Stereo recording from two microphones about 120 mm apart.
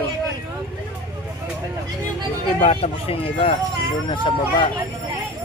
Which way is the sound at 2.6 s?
55° left (ahead or behind).